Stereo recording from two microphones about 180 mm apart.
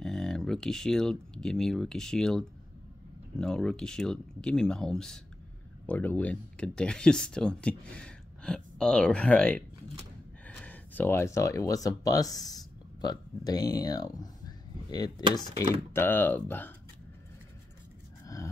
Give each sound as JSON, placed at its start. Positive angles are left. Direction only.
{"t": 0.0, "sound": "speech", "side_deg": 5}
{"t": 15.7, "sound": "speech", "side_deg": 15}
{"t": 18.2, "sound": "a sound", "side_deg": 20}